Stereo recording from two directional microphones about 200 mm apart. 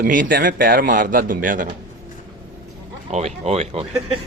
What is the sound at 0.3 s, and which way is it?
A man's voice, 55° right (ahead or behind).